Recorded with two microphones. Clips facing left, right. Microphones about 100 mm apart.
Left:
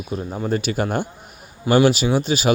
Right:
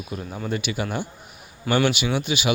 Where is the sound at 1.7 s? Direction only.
35° left (ahead or behind).